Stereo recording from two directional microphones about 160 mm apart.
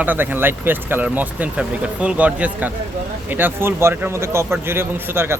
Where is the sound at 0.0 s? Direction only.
10° right (ahead or behind).